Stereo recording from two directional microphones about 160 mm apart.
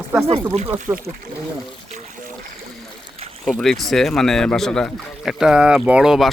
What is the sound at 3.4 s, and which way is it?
Speech, centre (ahead or behind).